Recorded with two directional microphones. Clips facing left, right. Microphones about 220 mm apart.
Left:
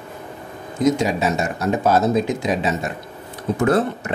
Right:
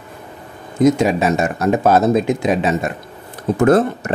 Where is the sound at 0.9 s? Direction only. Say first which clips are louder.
Right 4 dB; 55° right (ahead or behind).